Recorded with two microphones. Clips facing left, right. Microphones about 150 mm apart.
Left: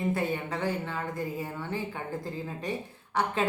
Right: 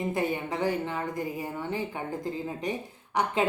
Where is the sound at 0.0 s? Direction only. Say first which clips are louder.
Right 1 dB; 15° right (ahead or behind).